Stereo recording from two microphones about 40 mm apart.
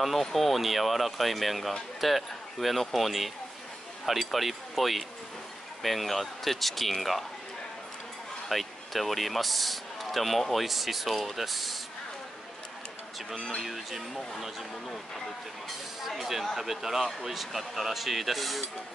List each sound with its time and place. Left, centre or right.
0.0 s speech: centre
4.3 s speech: centre
8.5 s speech: centre
13.6 s speech: centre
16.0 s speech: centre